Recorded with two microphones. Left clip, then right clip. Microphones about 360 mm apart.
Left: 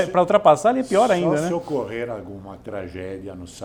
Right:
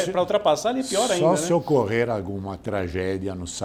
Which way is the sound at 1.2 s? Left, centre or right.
Right.